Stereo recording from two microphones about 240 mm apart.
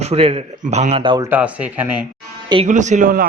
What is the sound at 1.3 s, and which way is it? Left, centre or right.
Speech, centre.